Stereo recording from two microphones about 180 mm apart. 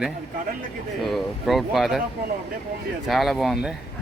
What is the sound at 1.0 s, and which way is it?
Speech, centre (ahead or behind).